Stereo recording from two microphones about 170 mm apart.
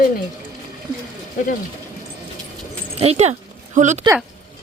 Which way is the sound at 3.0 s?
40° right (ahead or behind).